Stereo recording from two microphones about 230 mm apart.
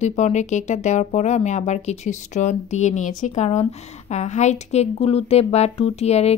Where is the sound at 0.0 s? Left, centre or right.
Left.